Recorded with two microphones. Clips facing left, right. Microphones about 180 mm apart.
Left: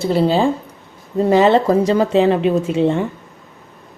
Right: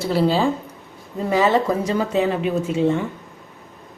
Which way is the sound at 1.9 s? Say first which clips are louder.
Left 6 dB; 30° left (ahead or behind).